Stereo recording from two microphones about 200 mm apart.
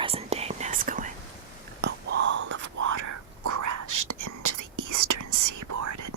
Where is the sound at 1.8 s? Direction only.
60° right (ahead or behind).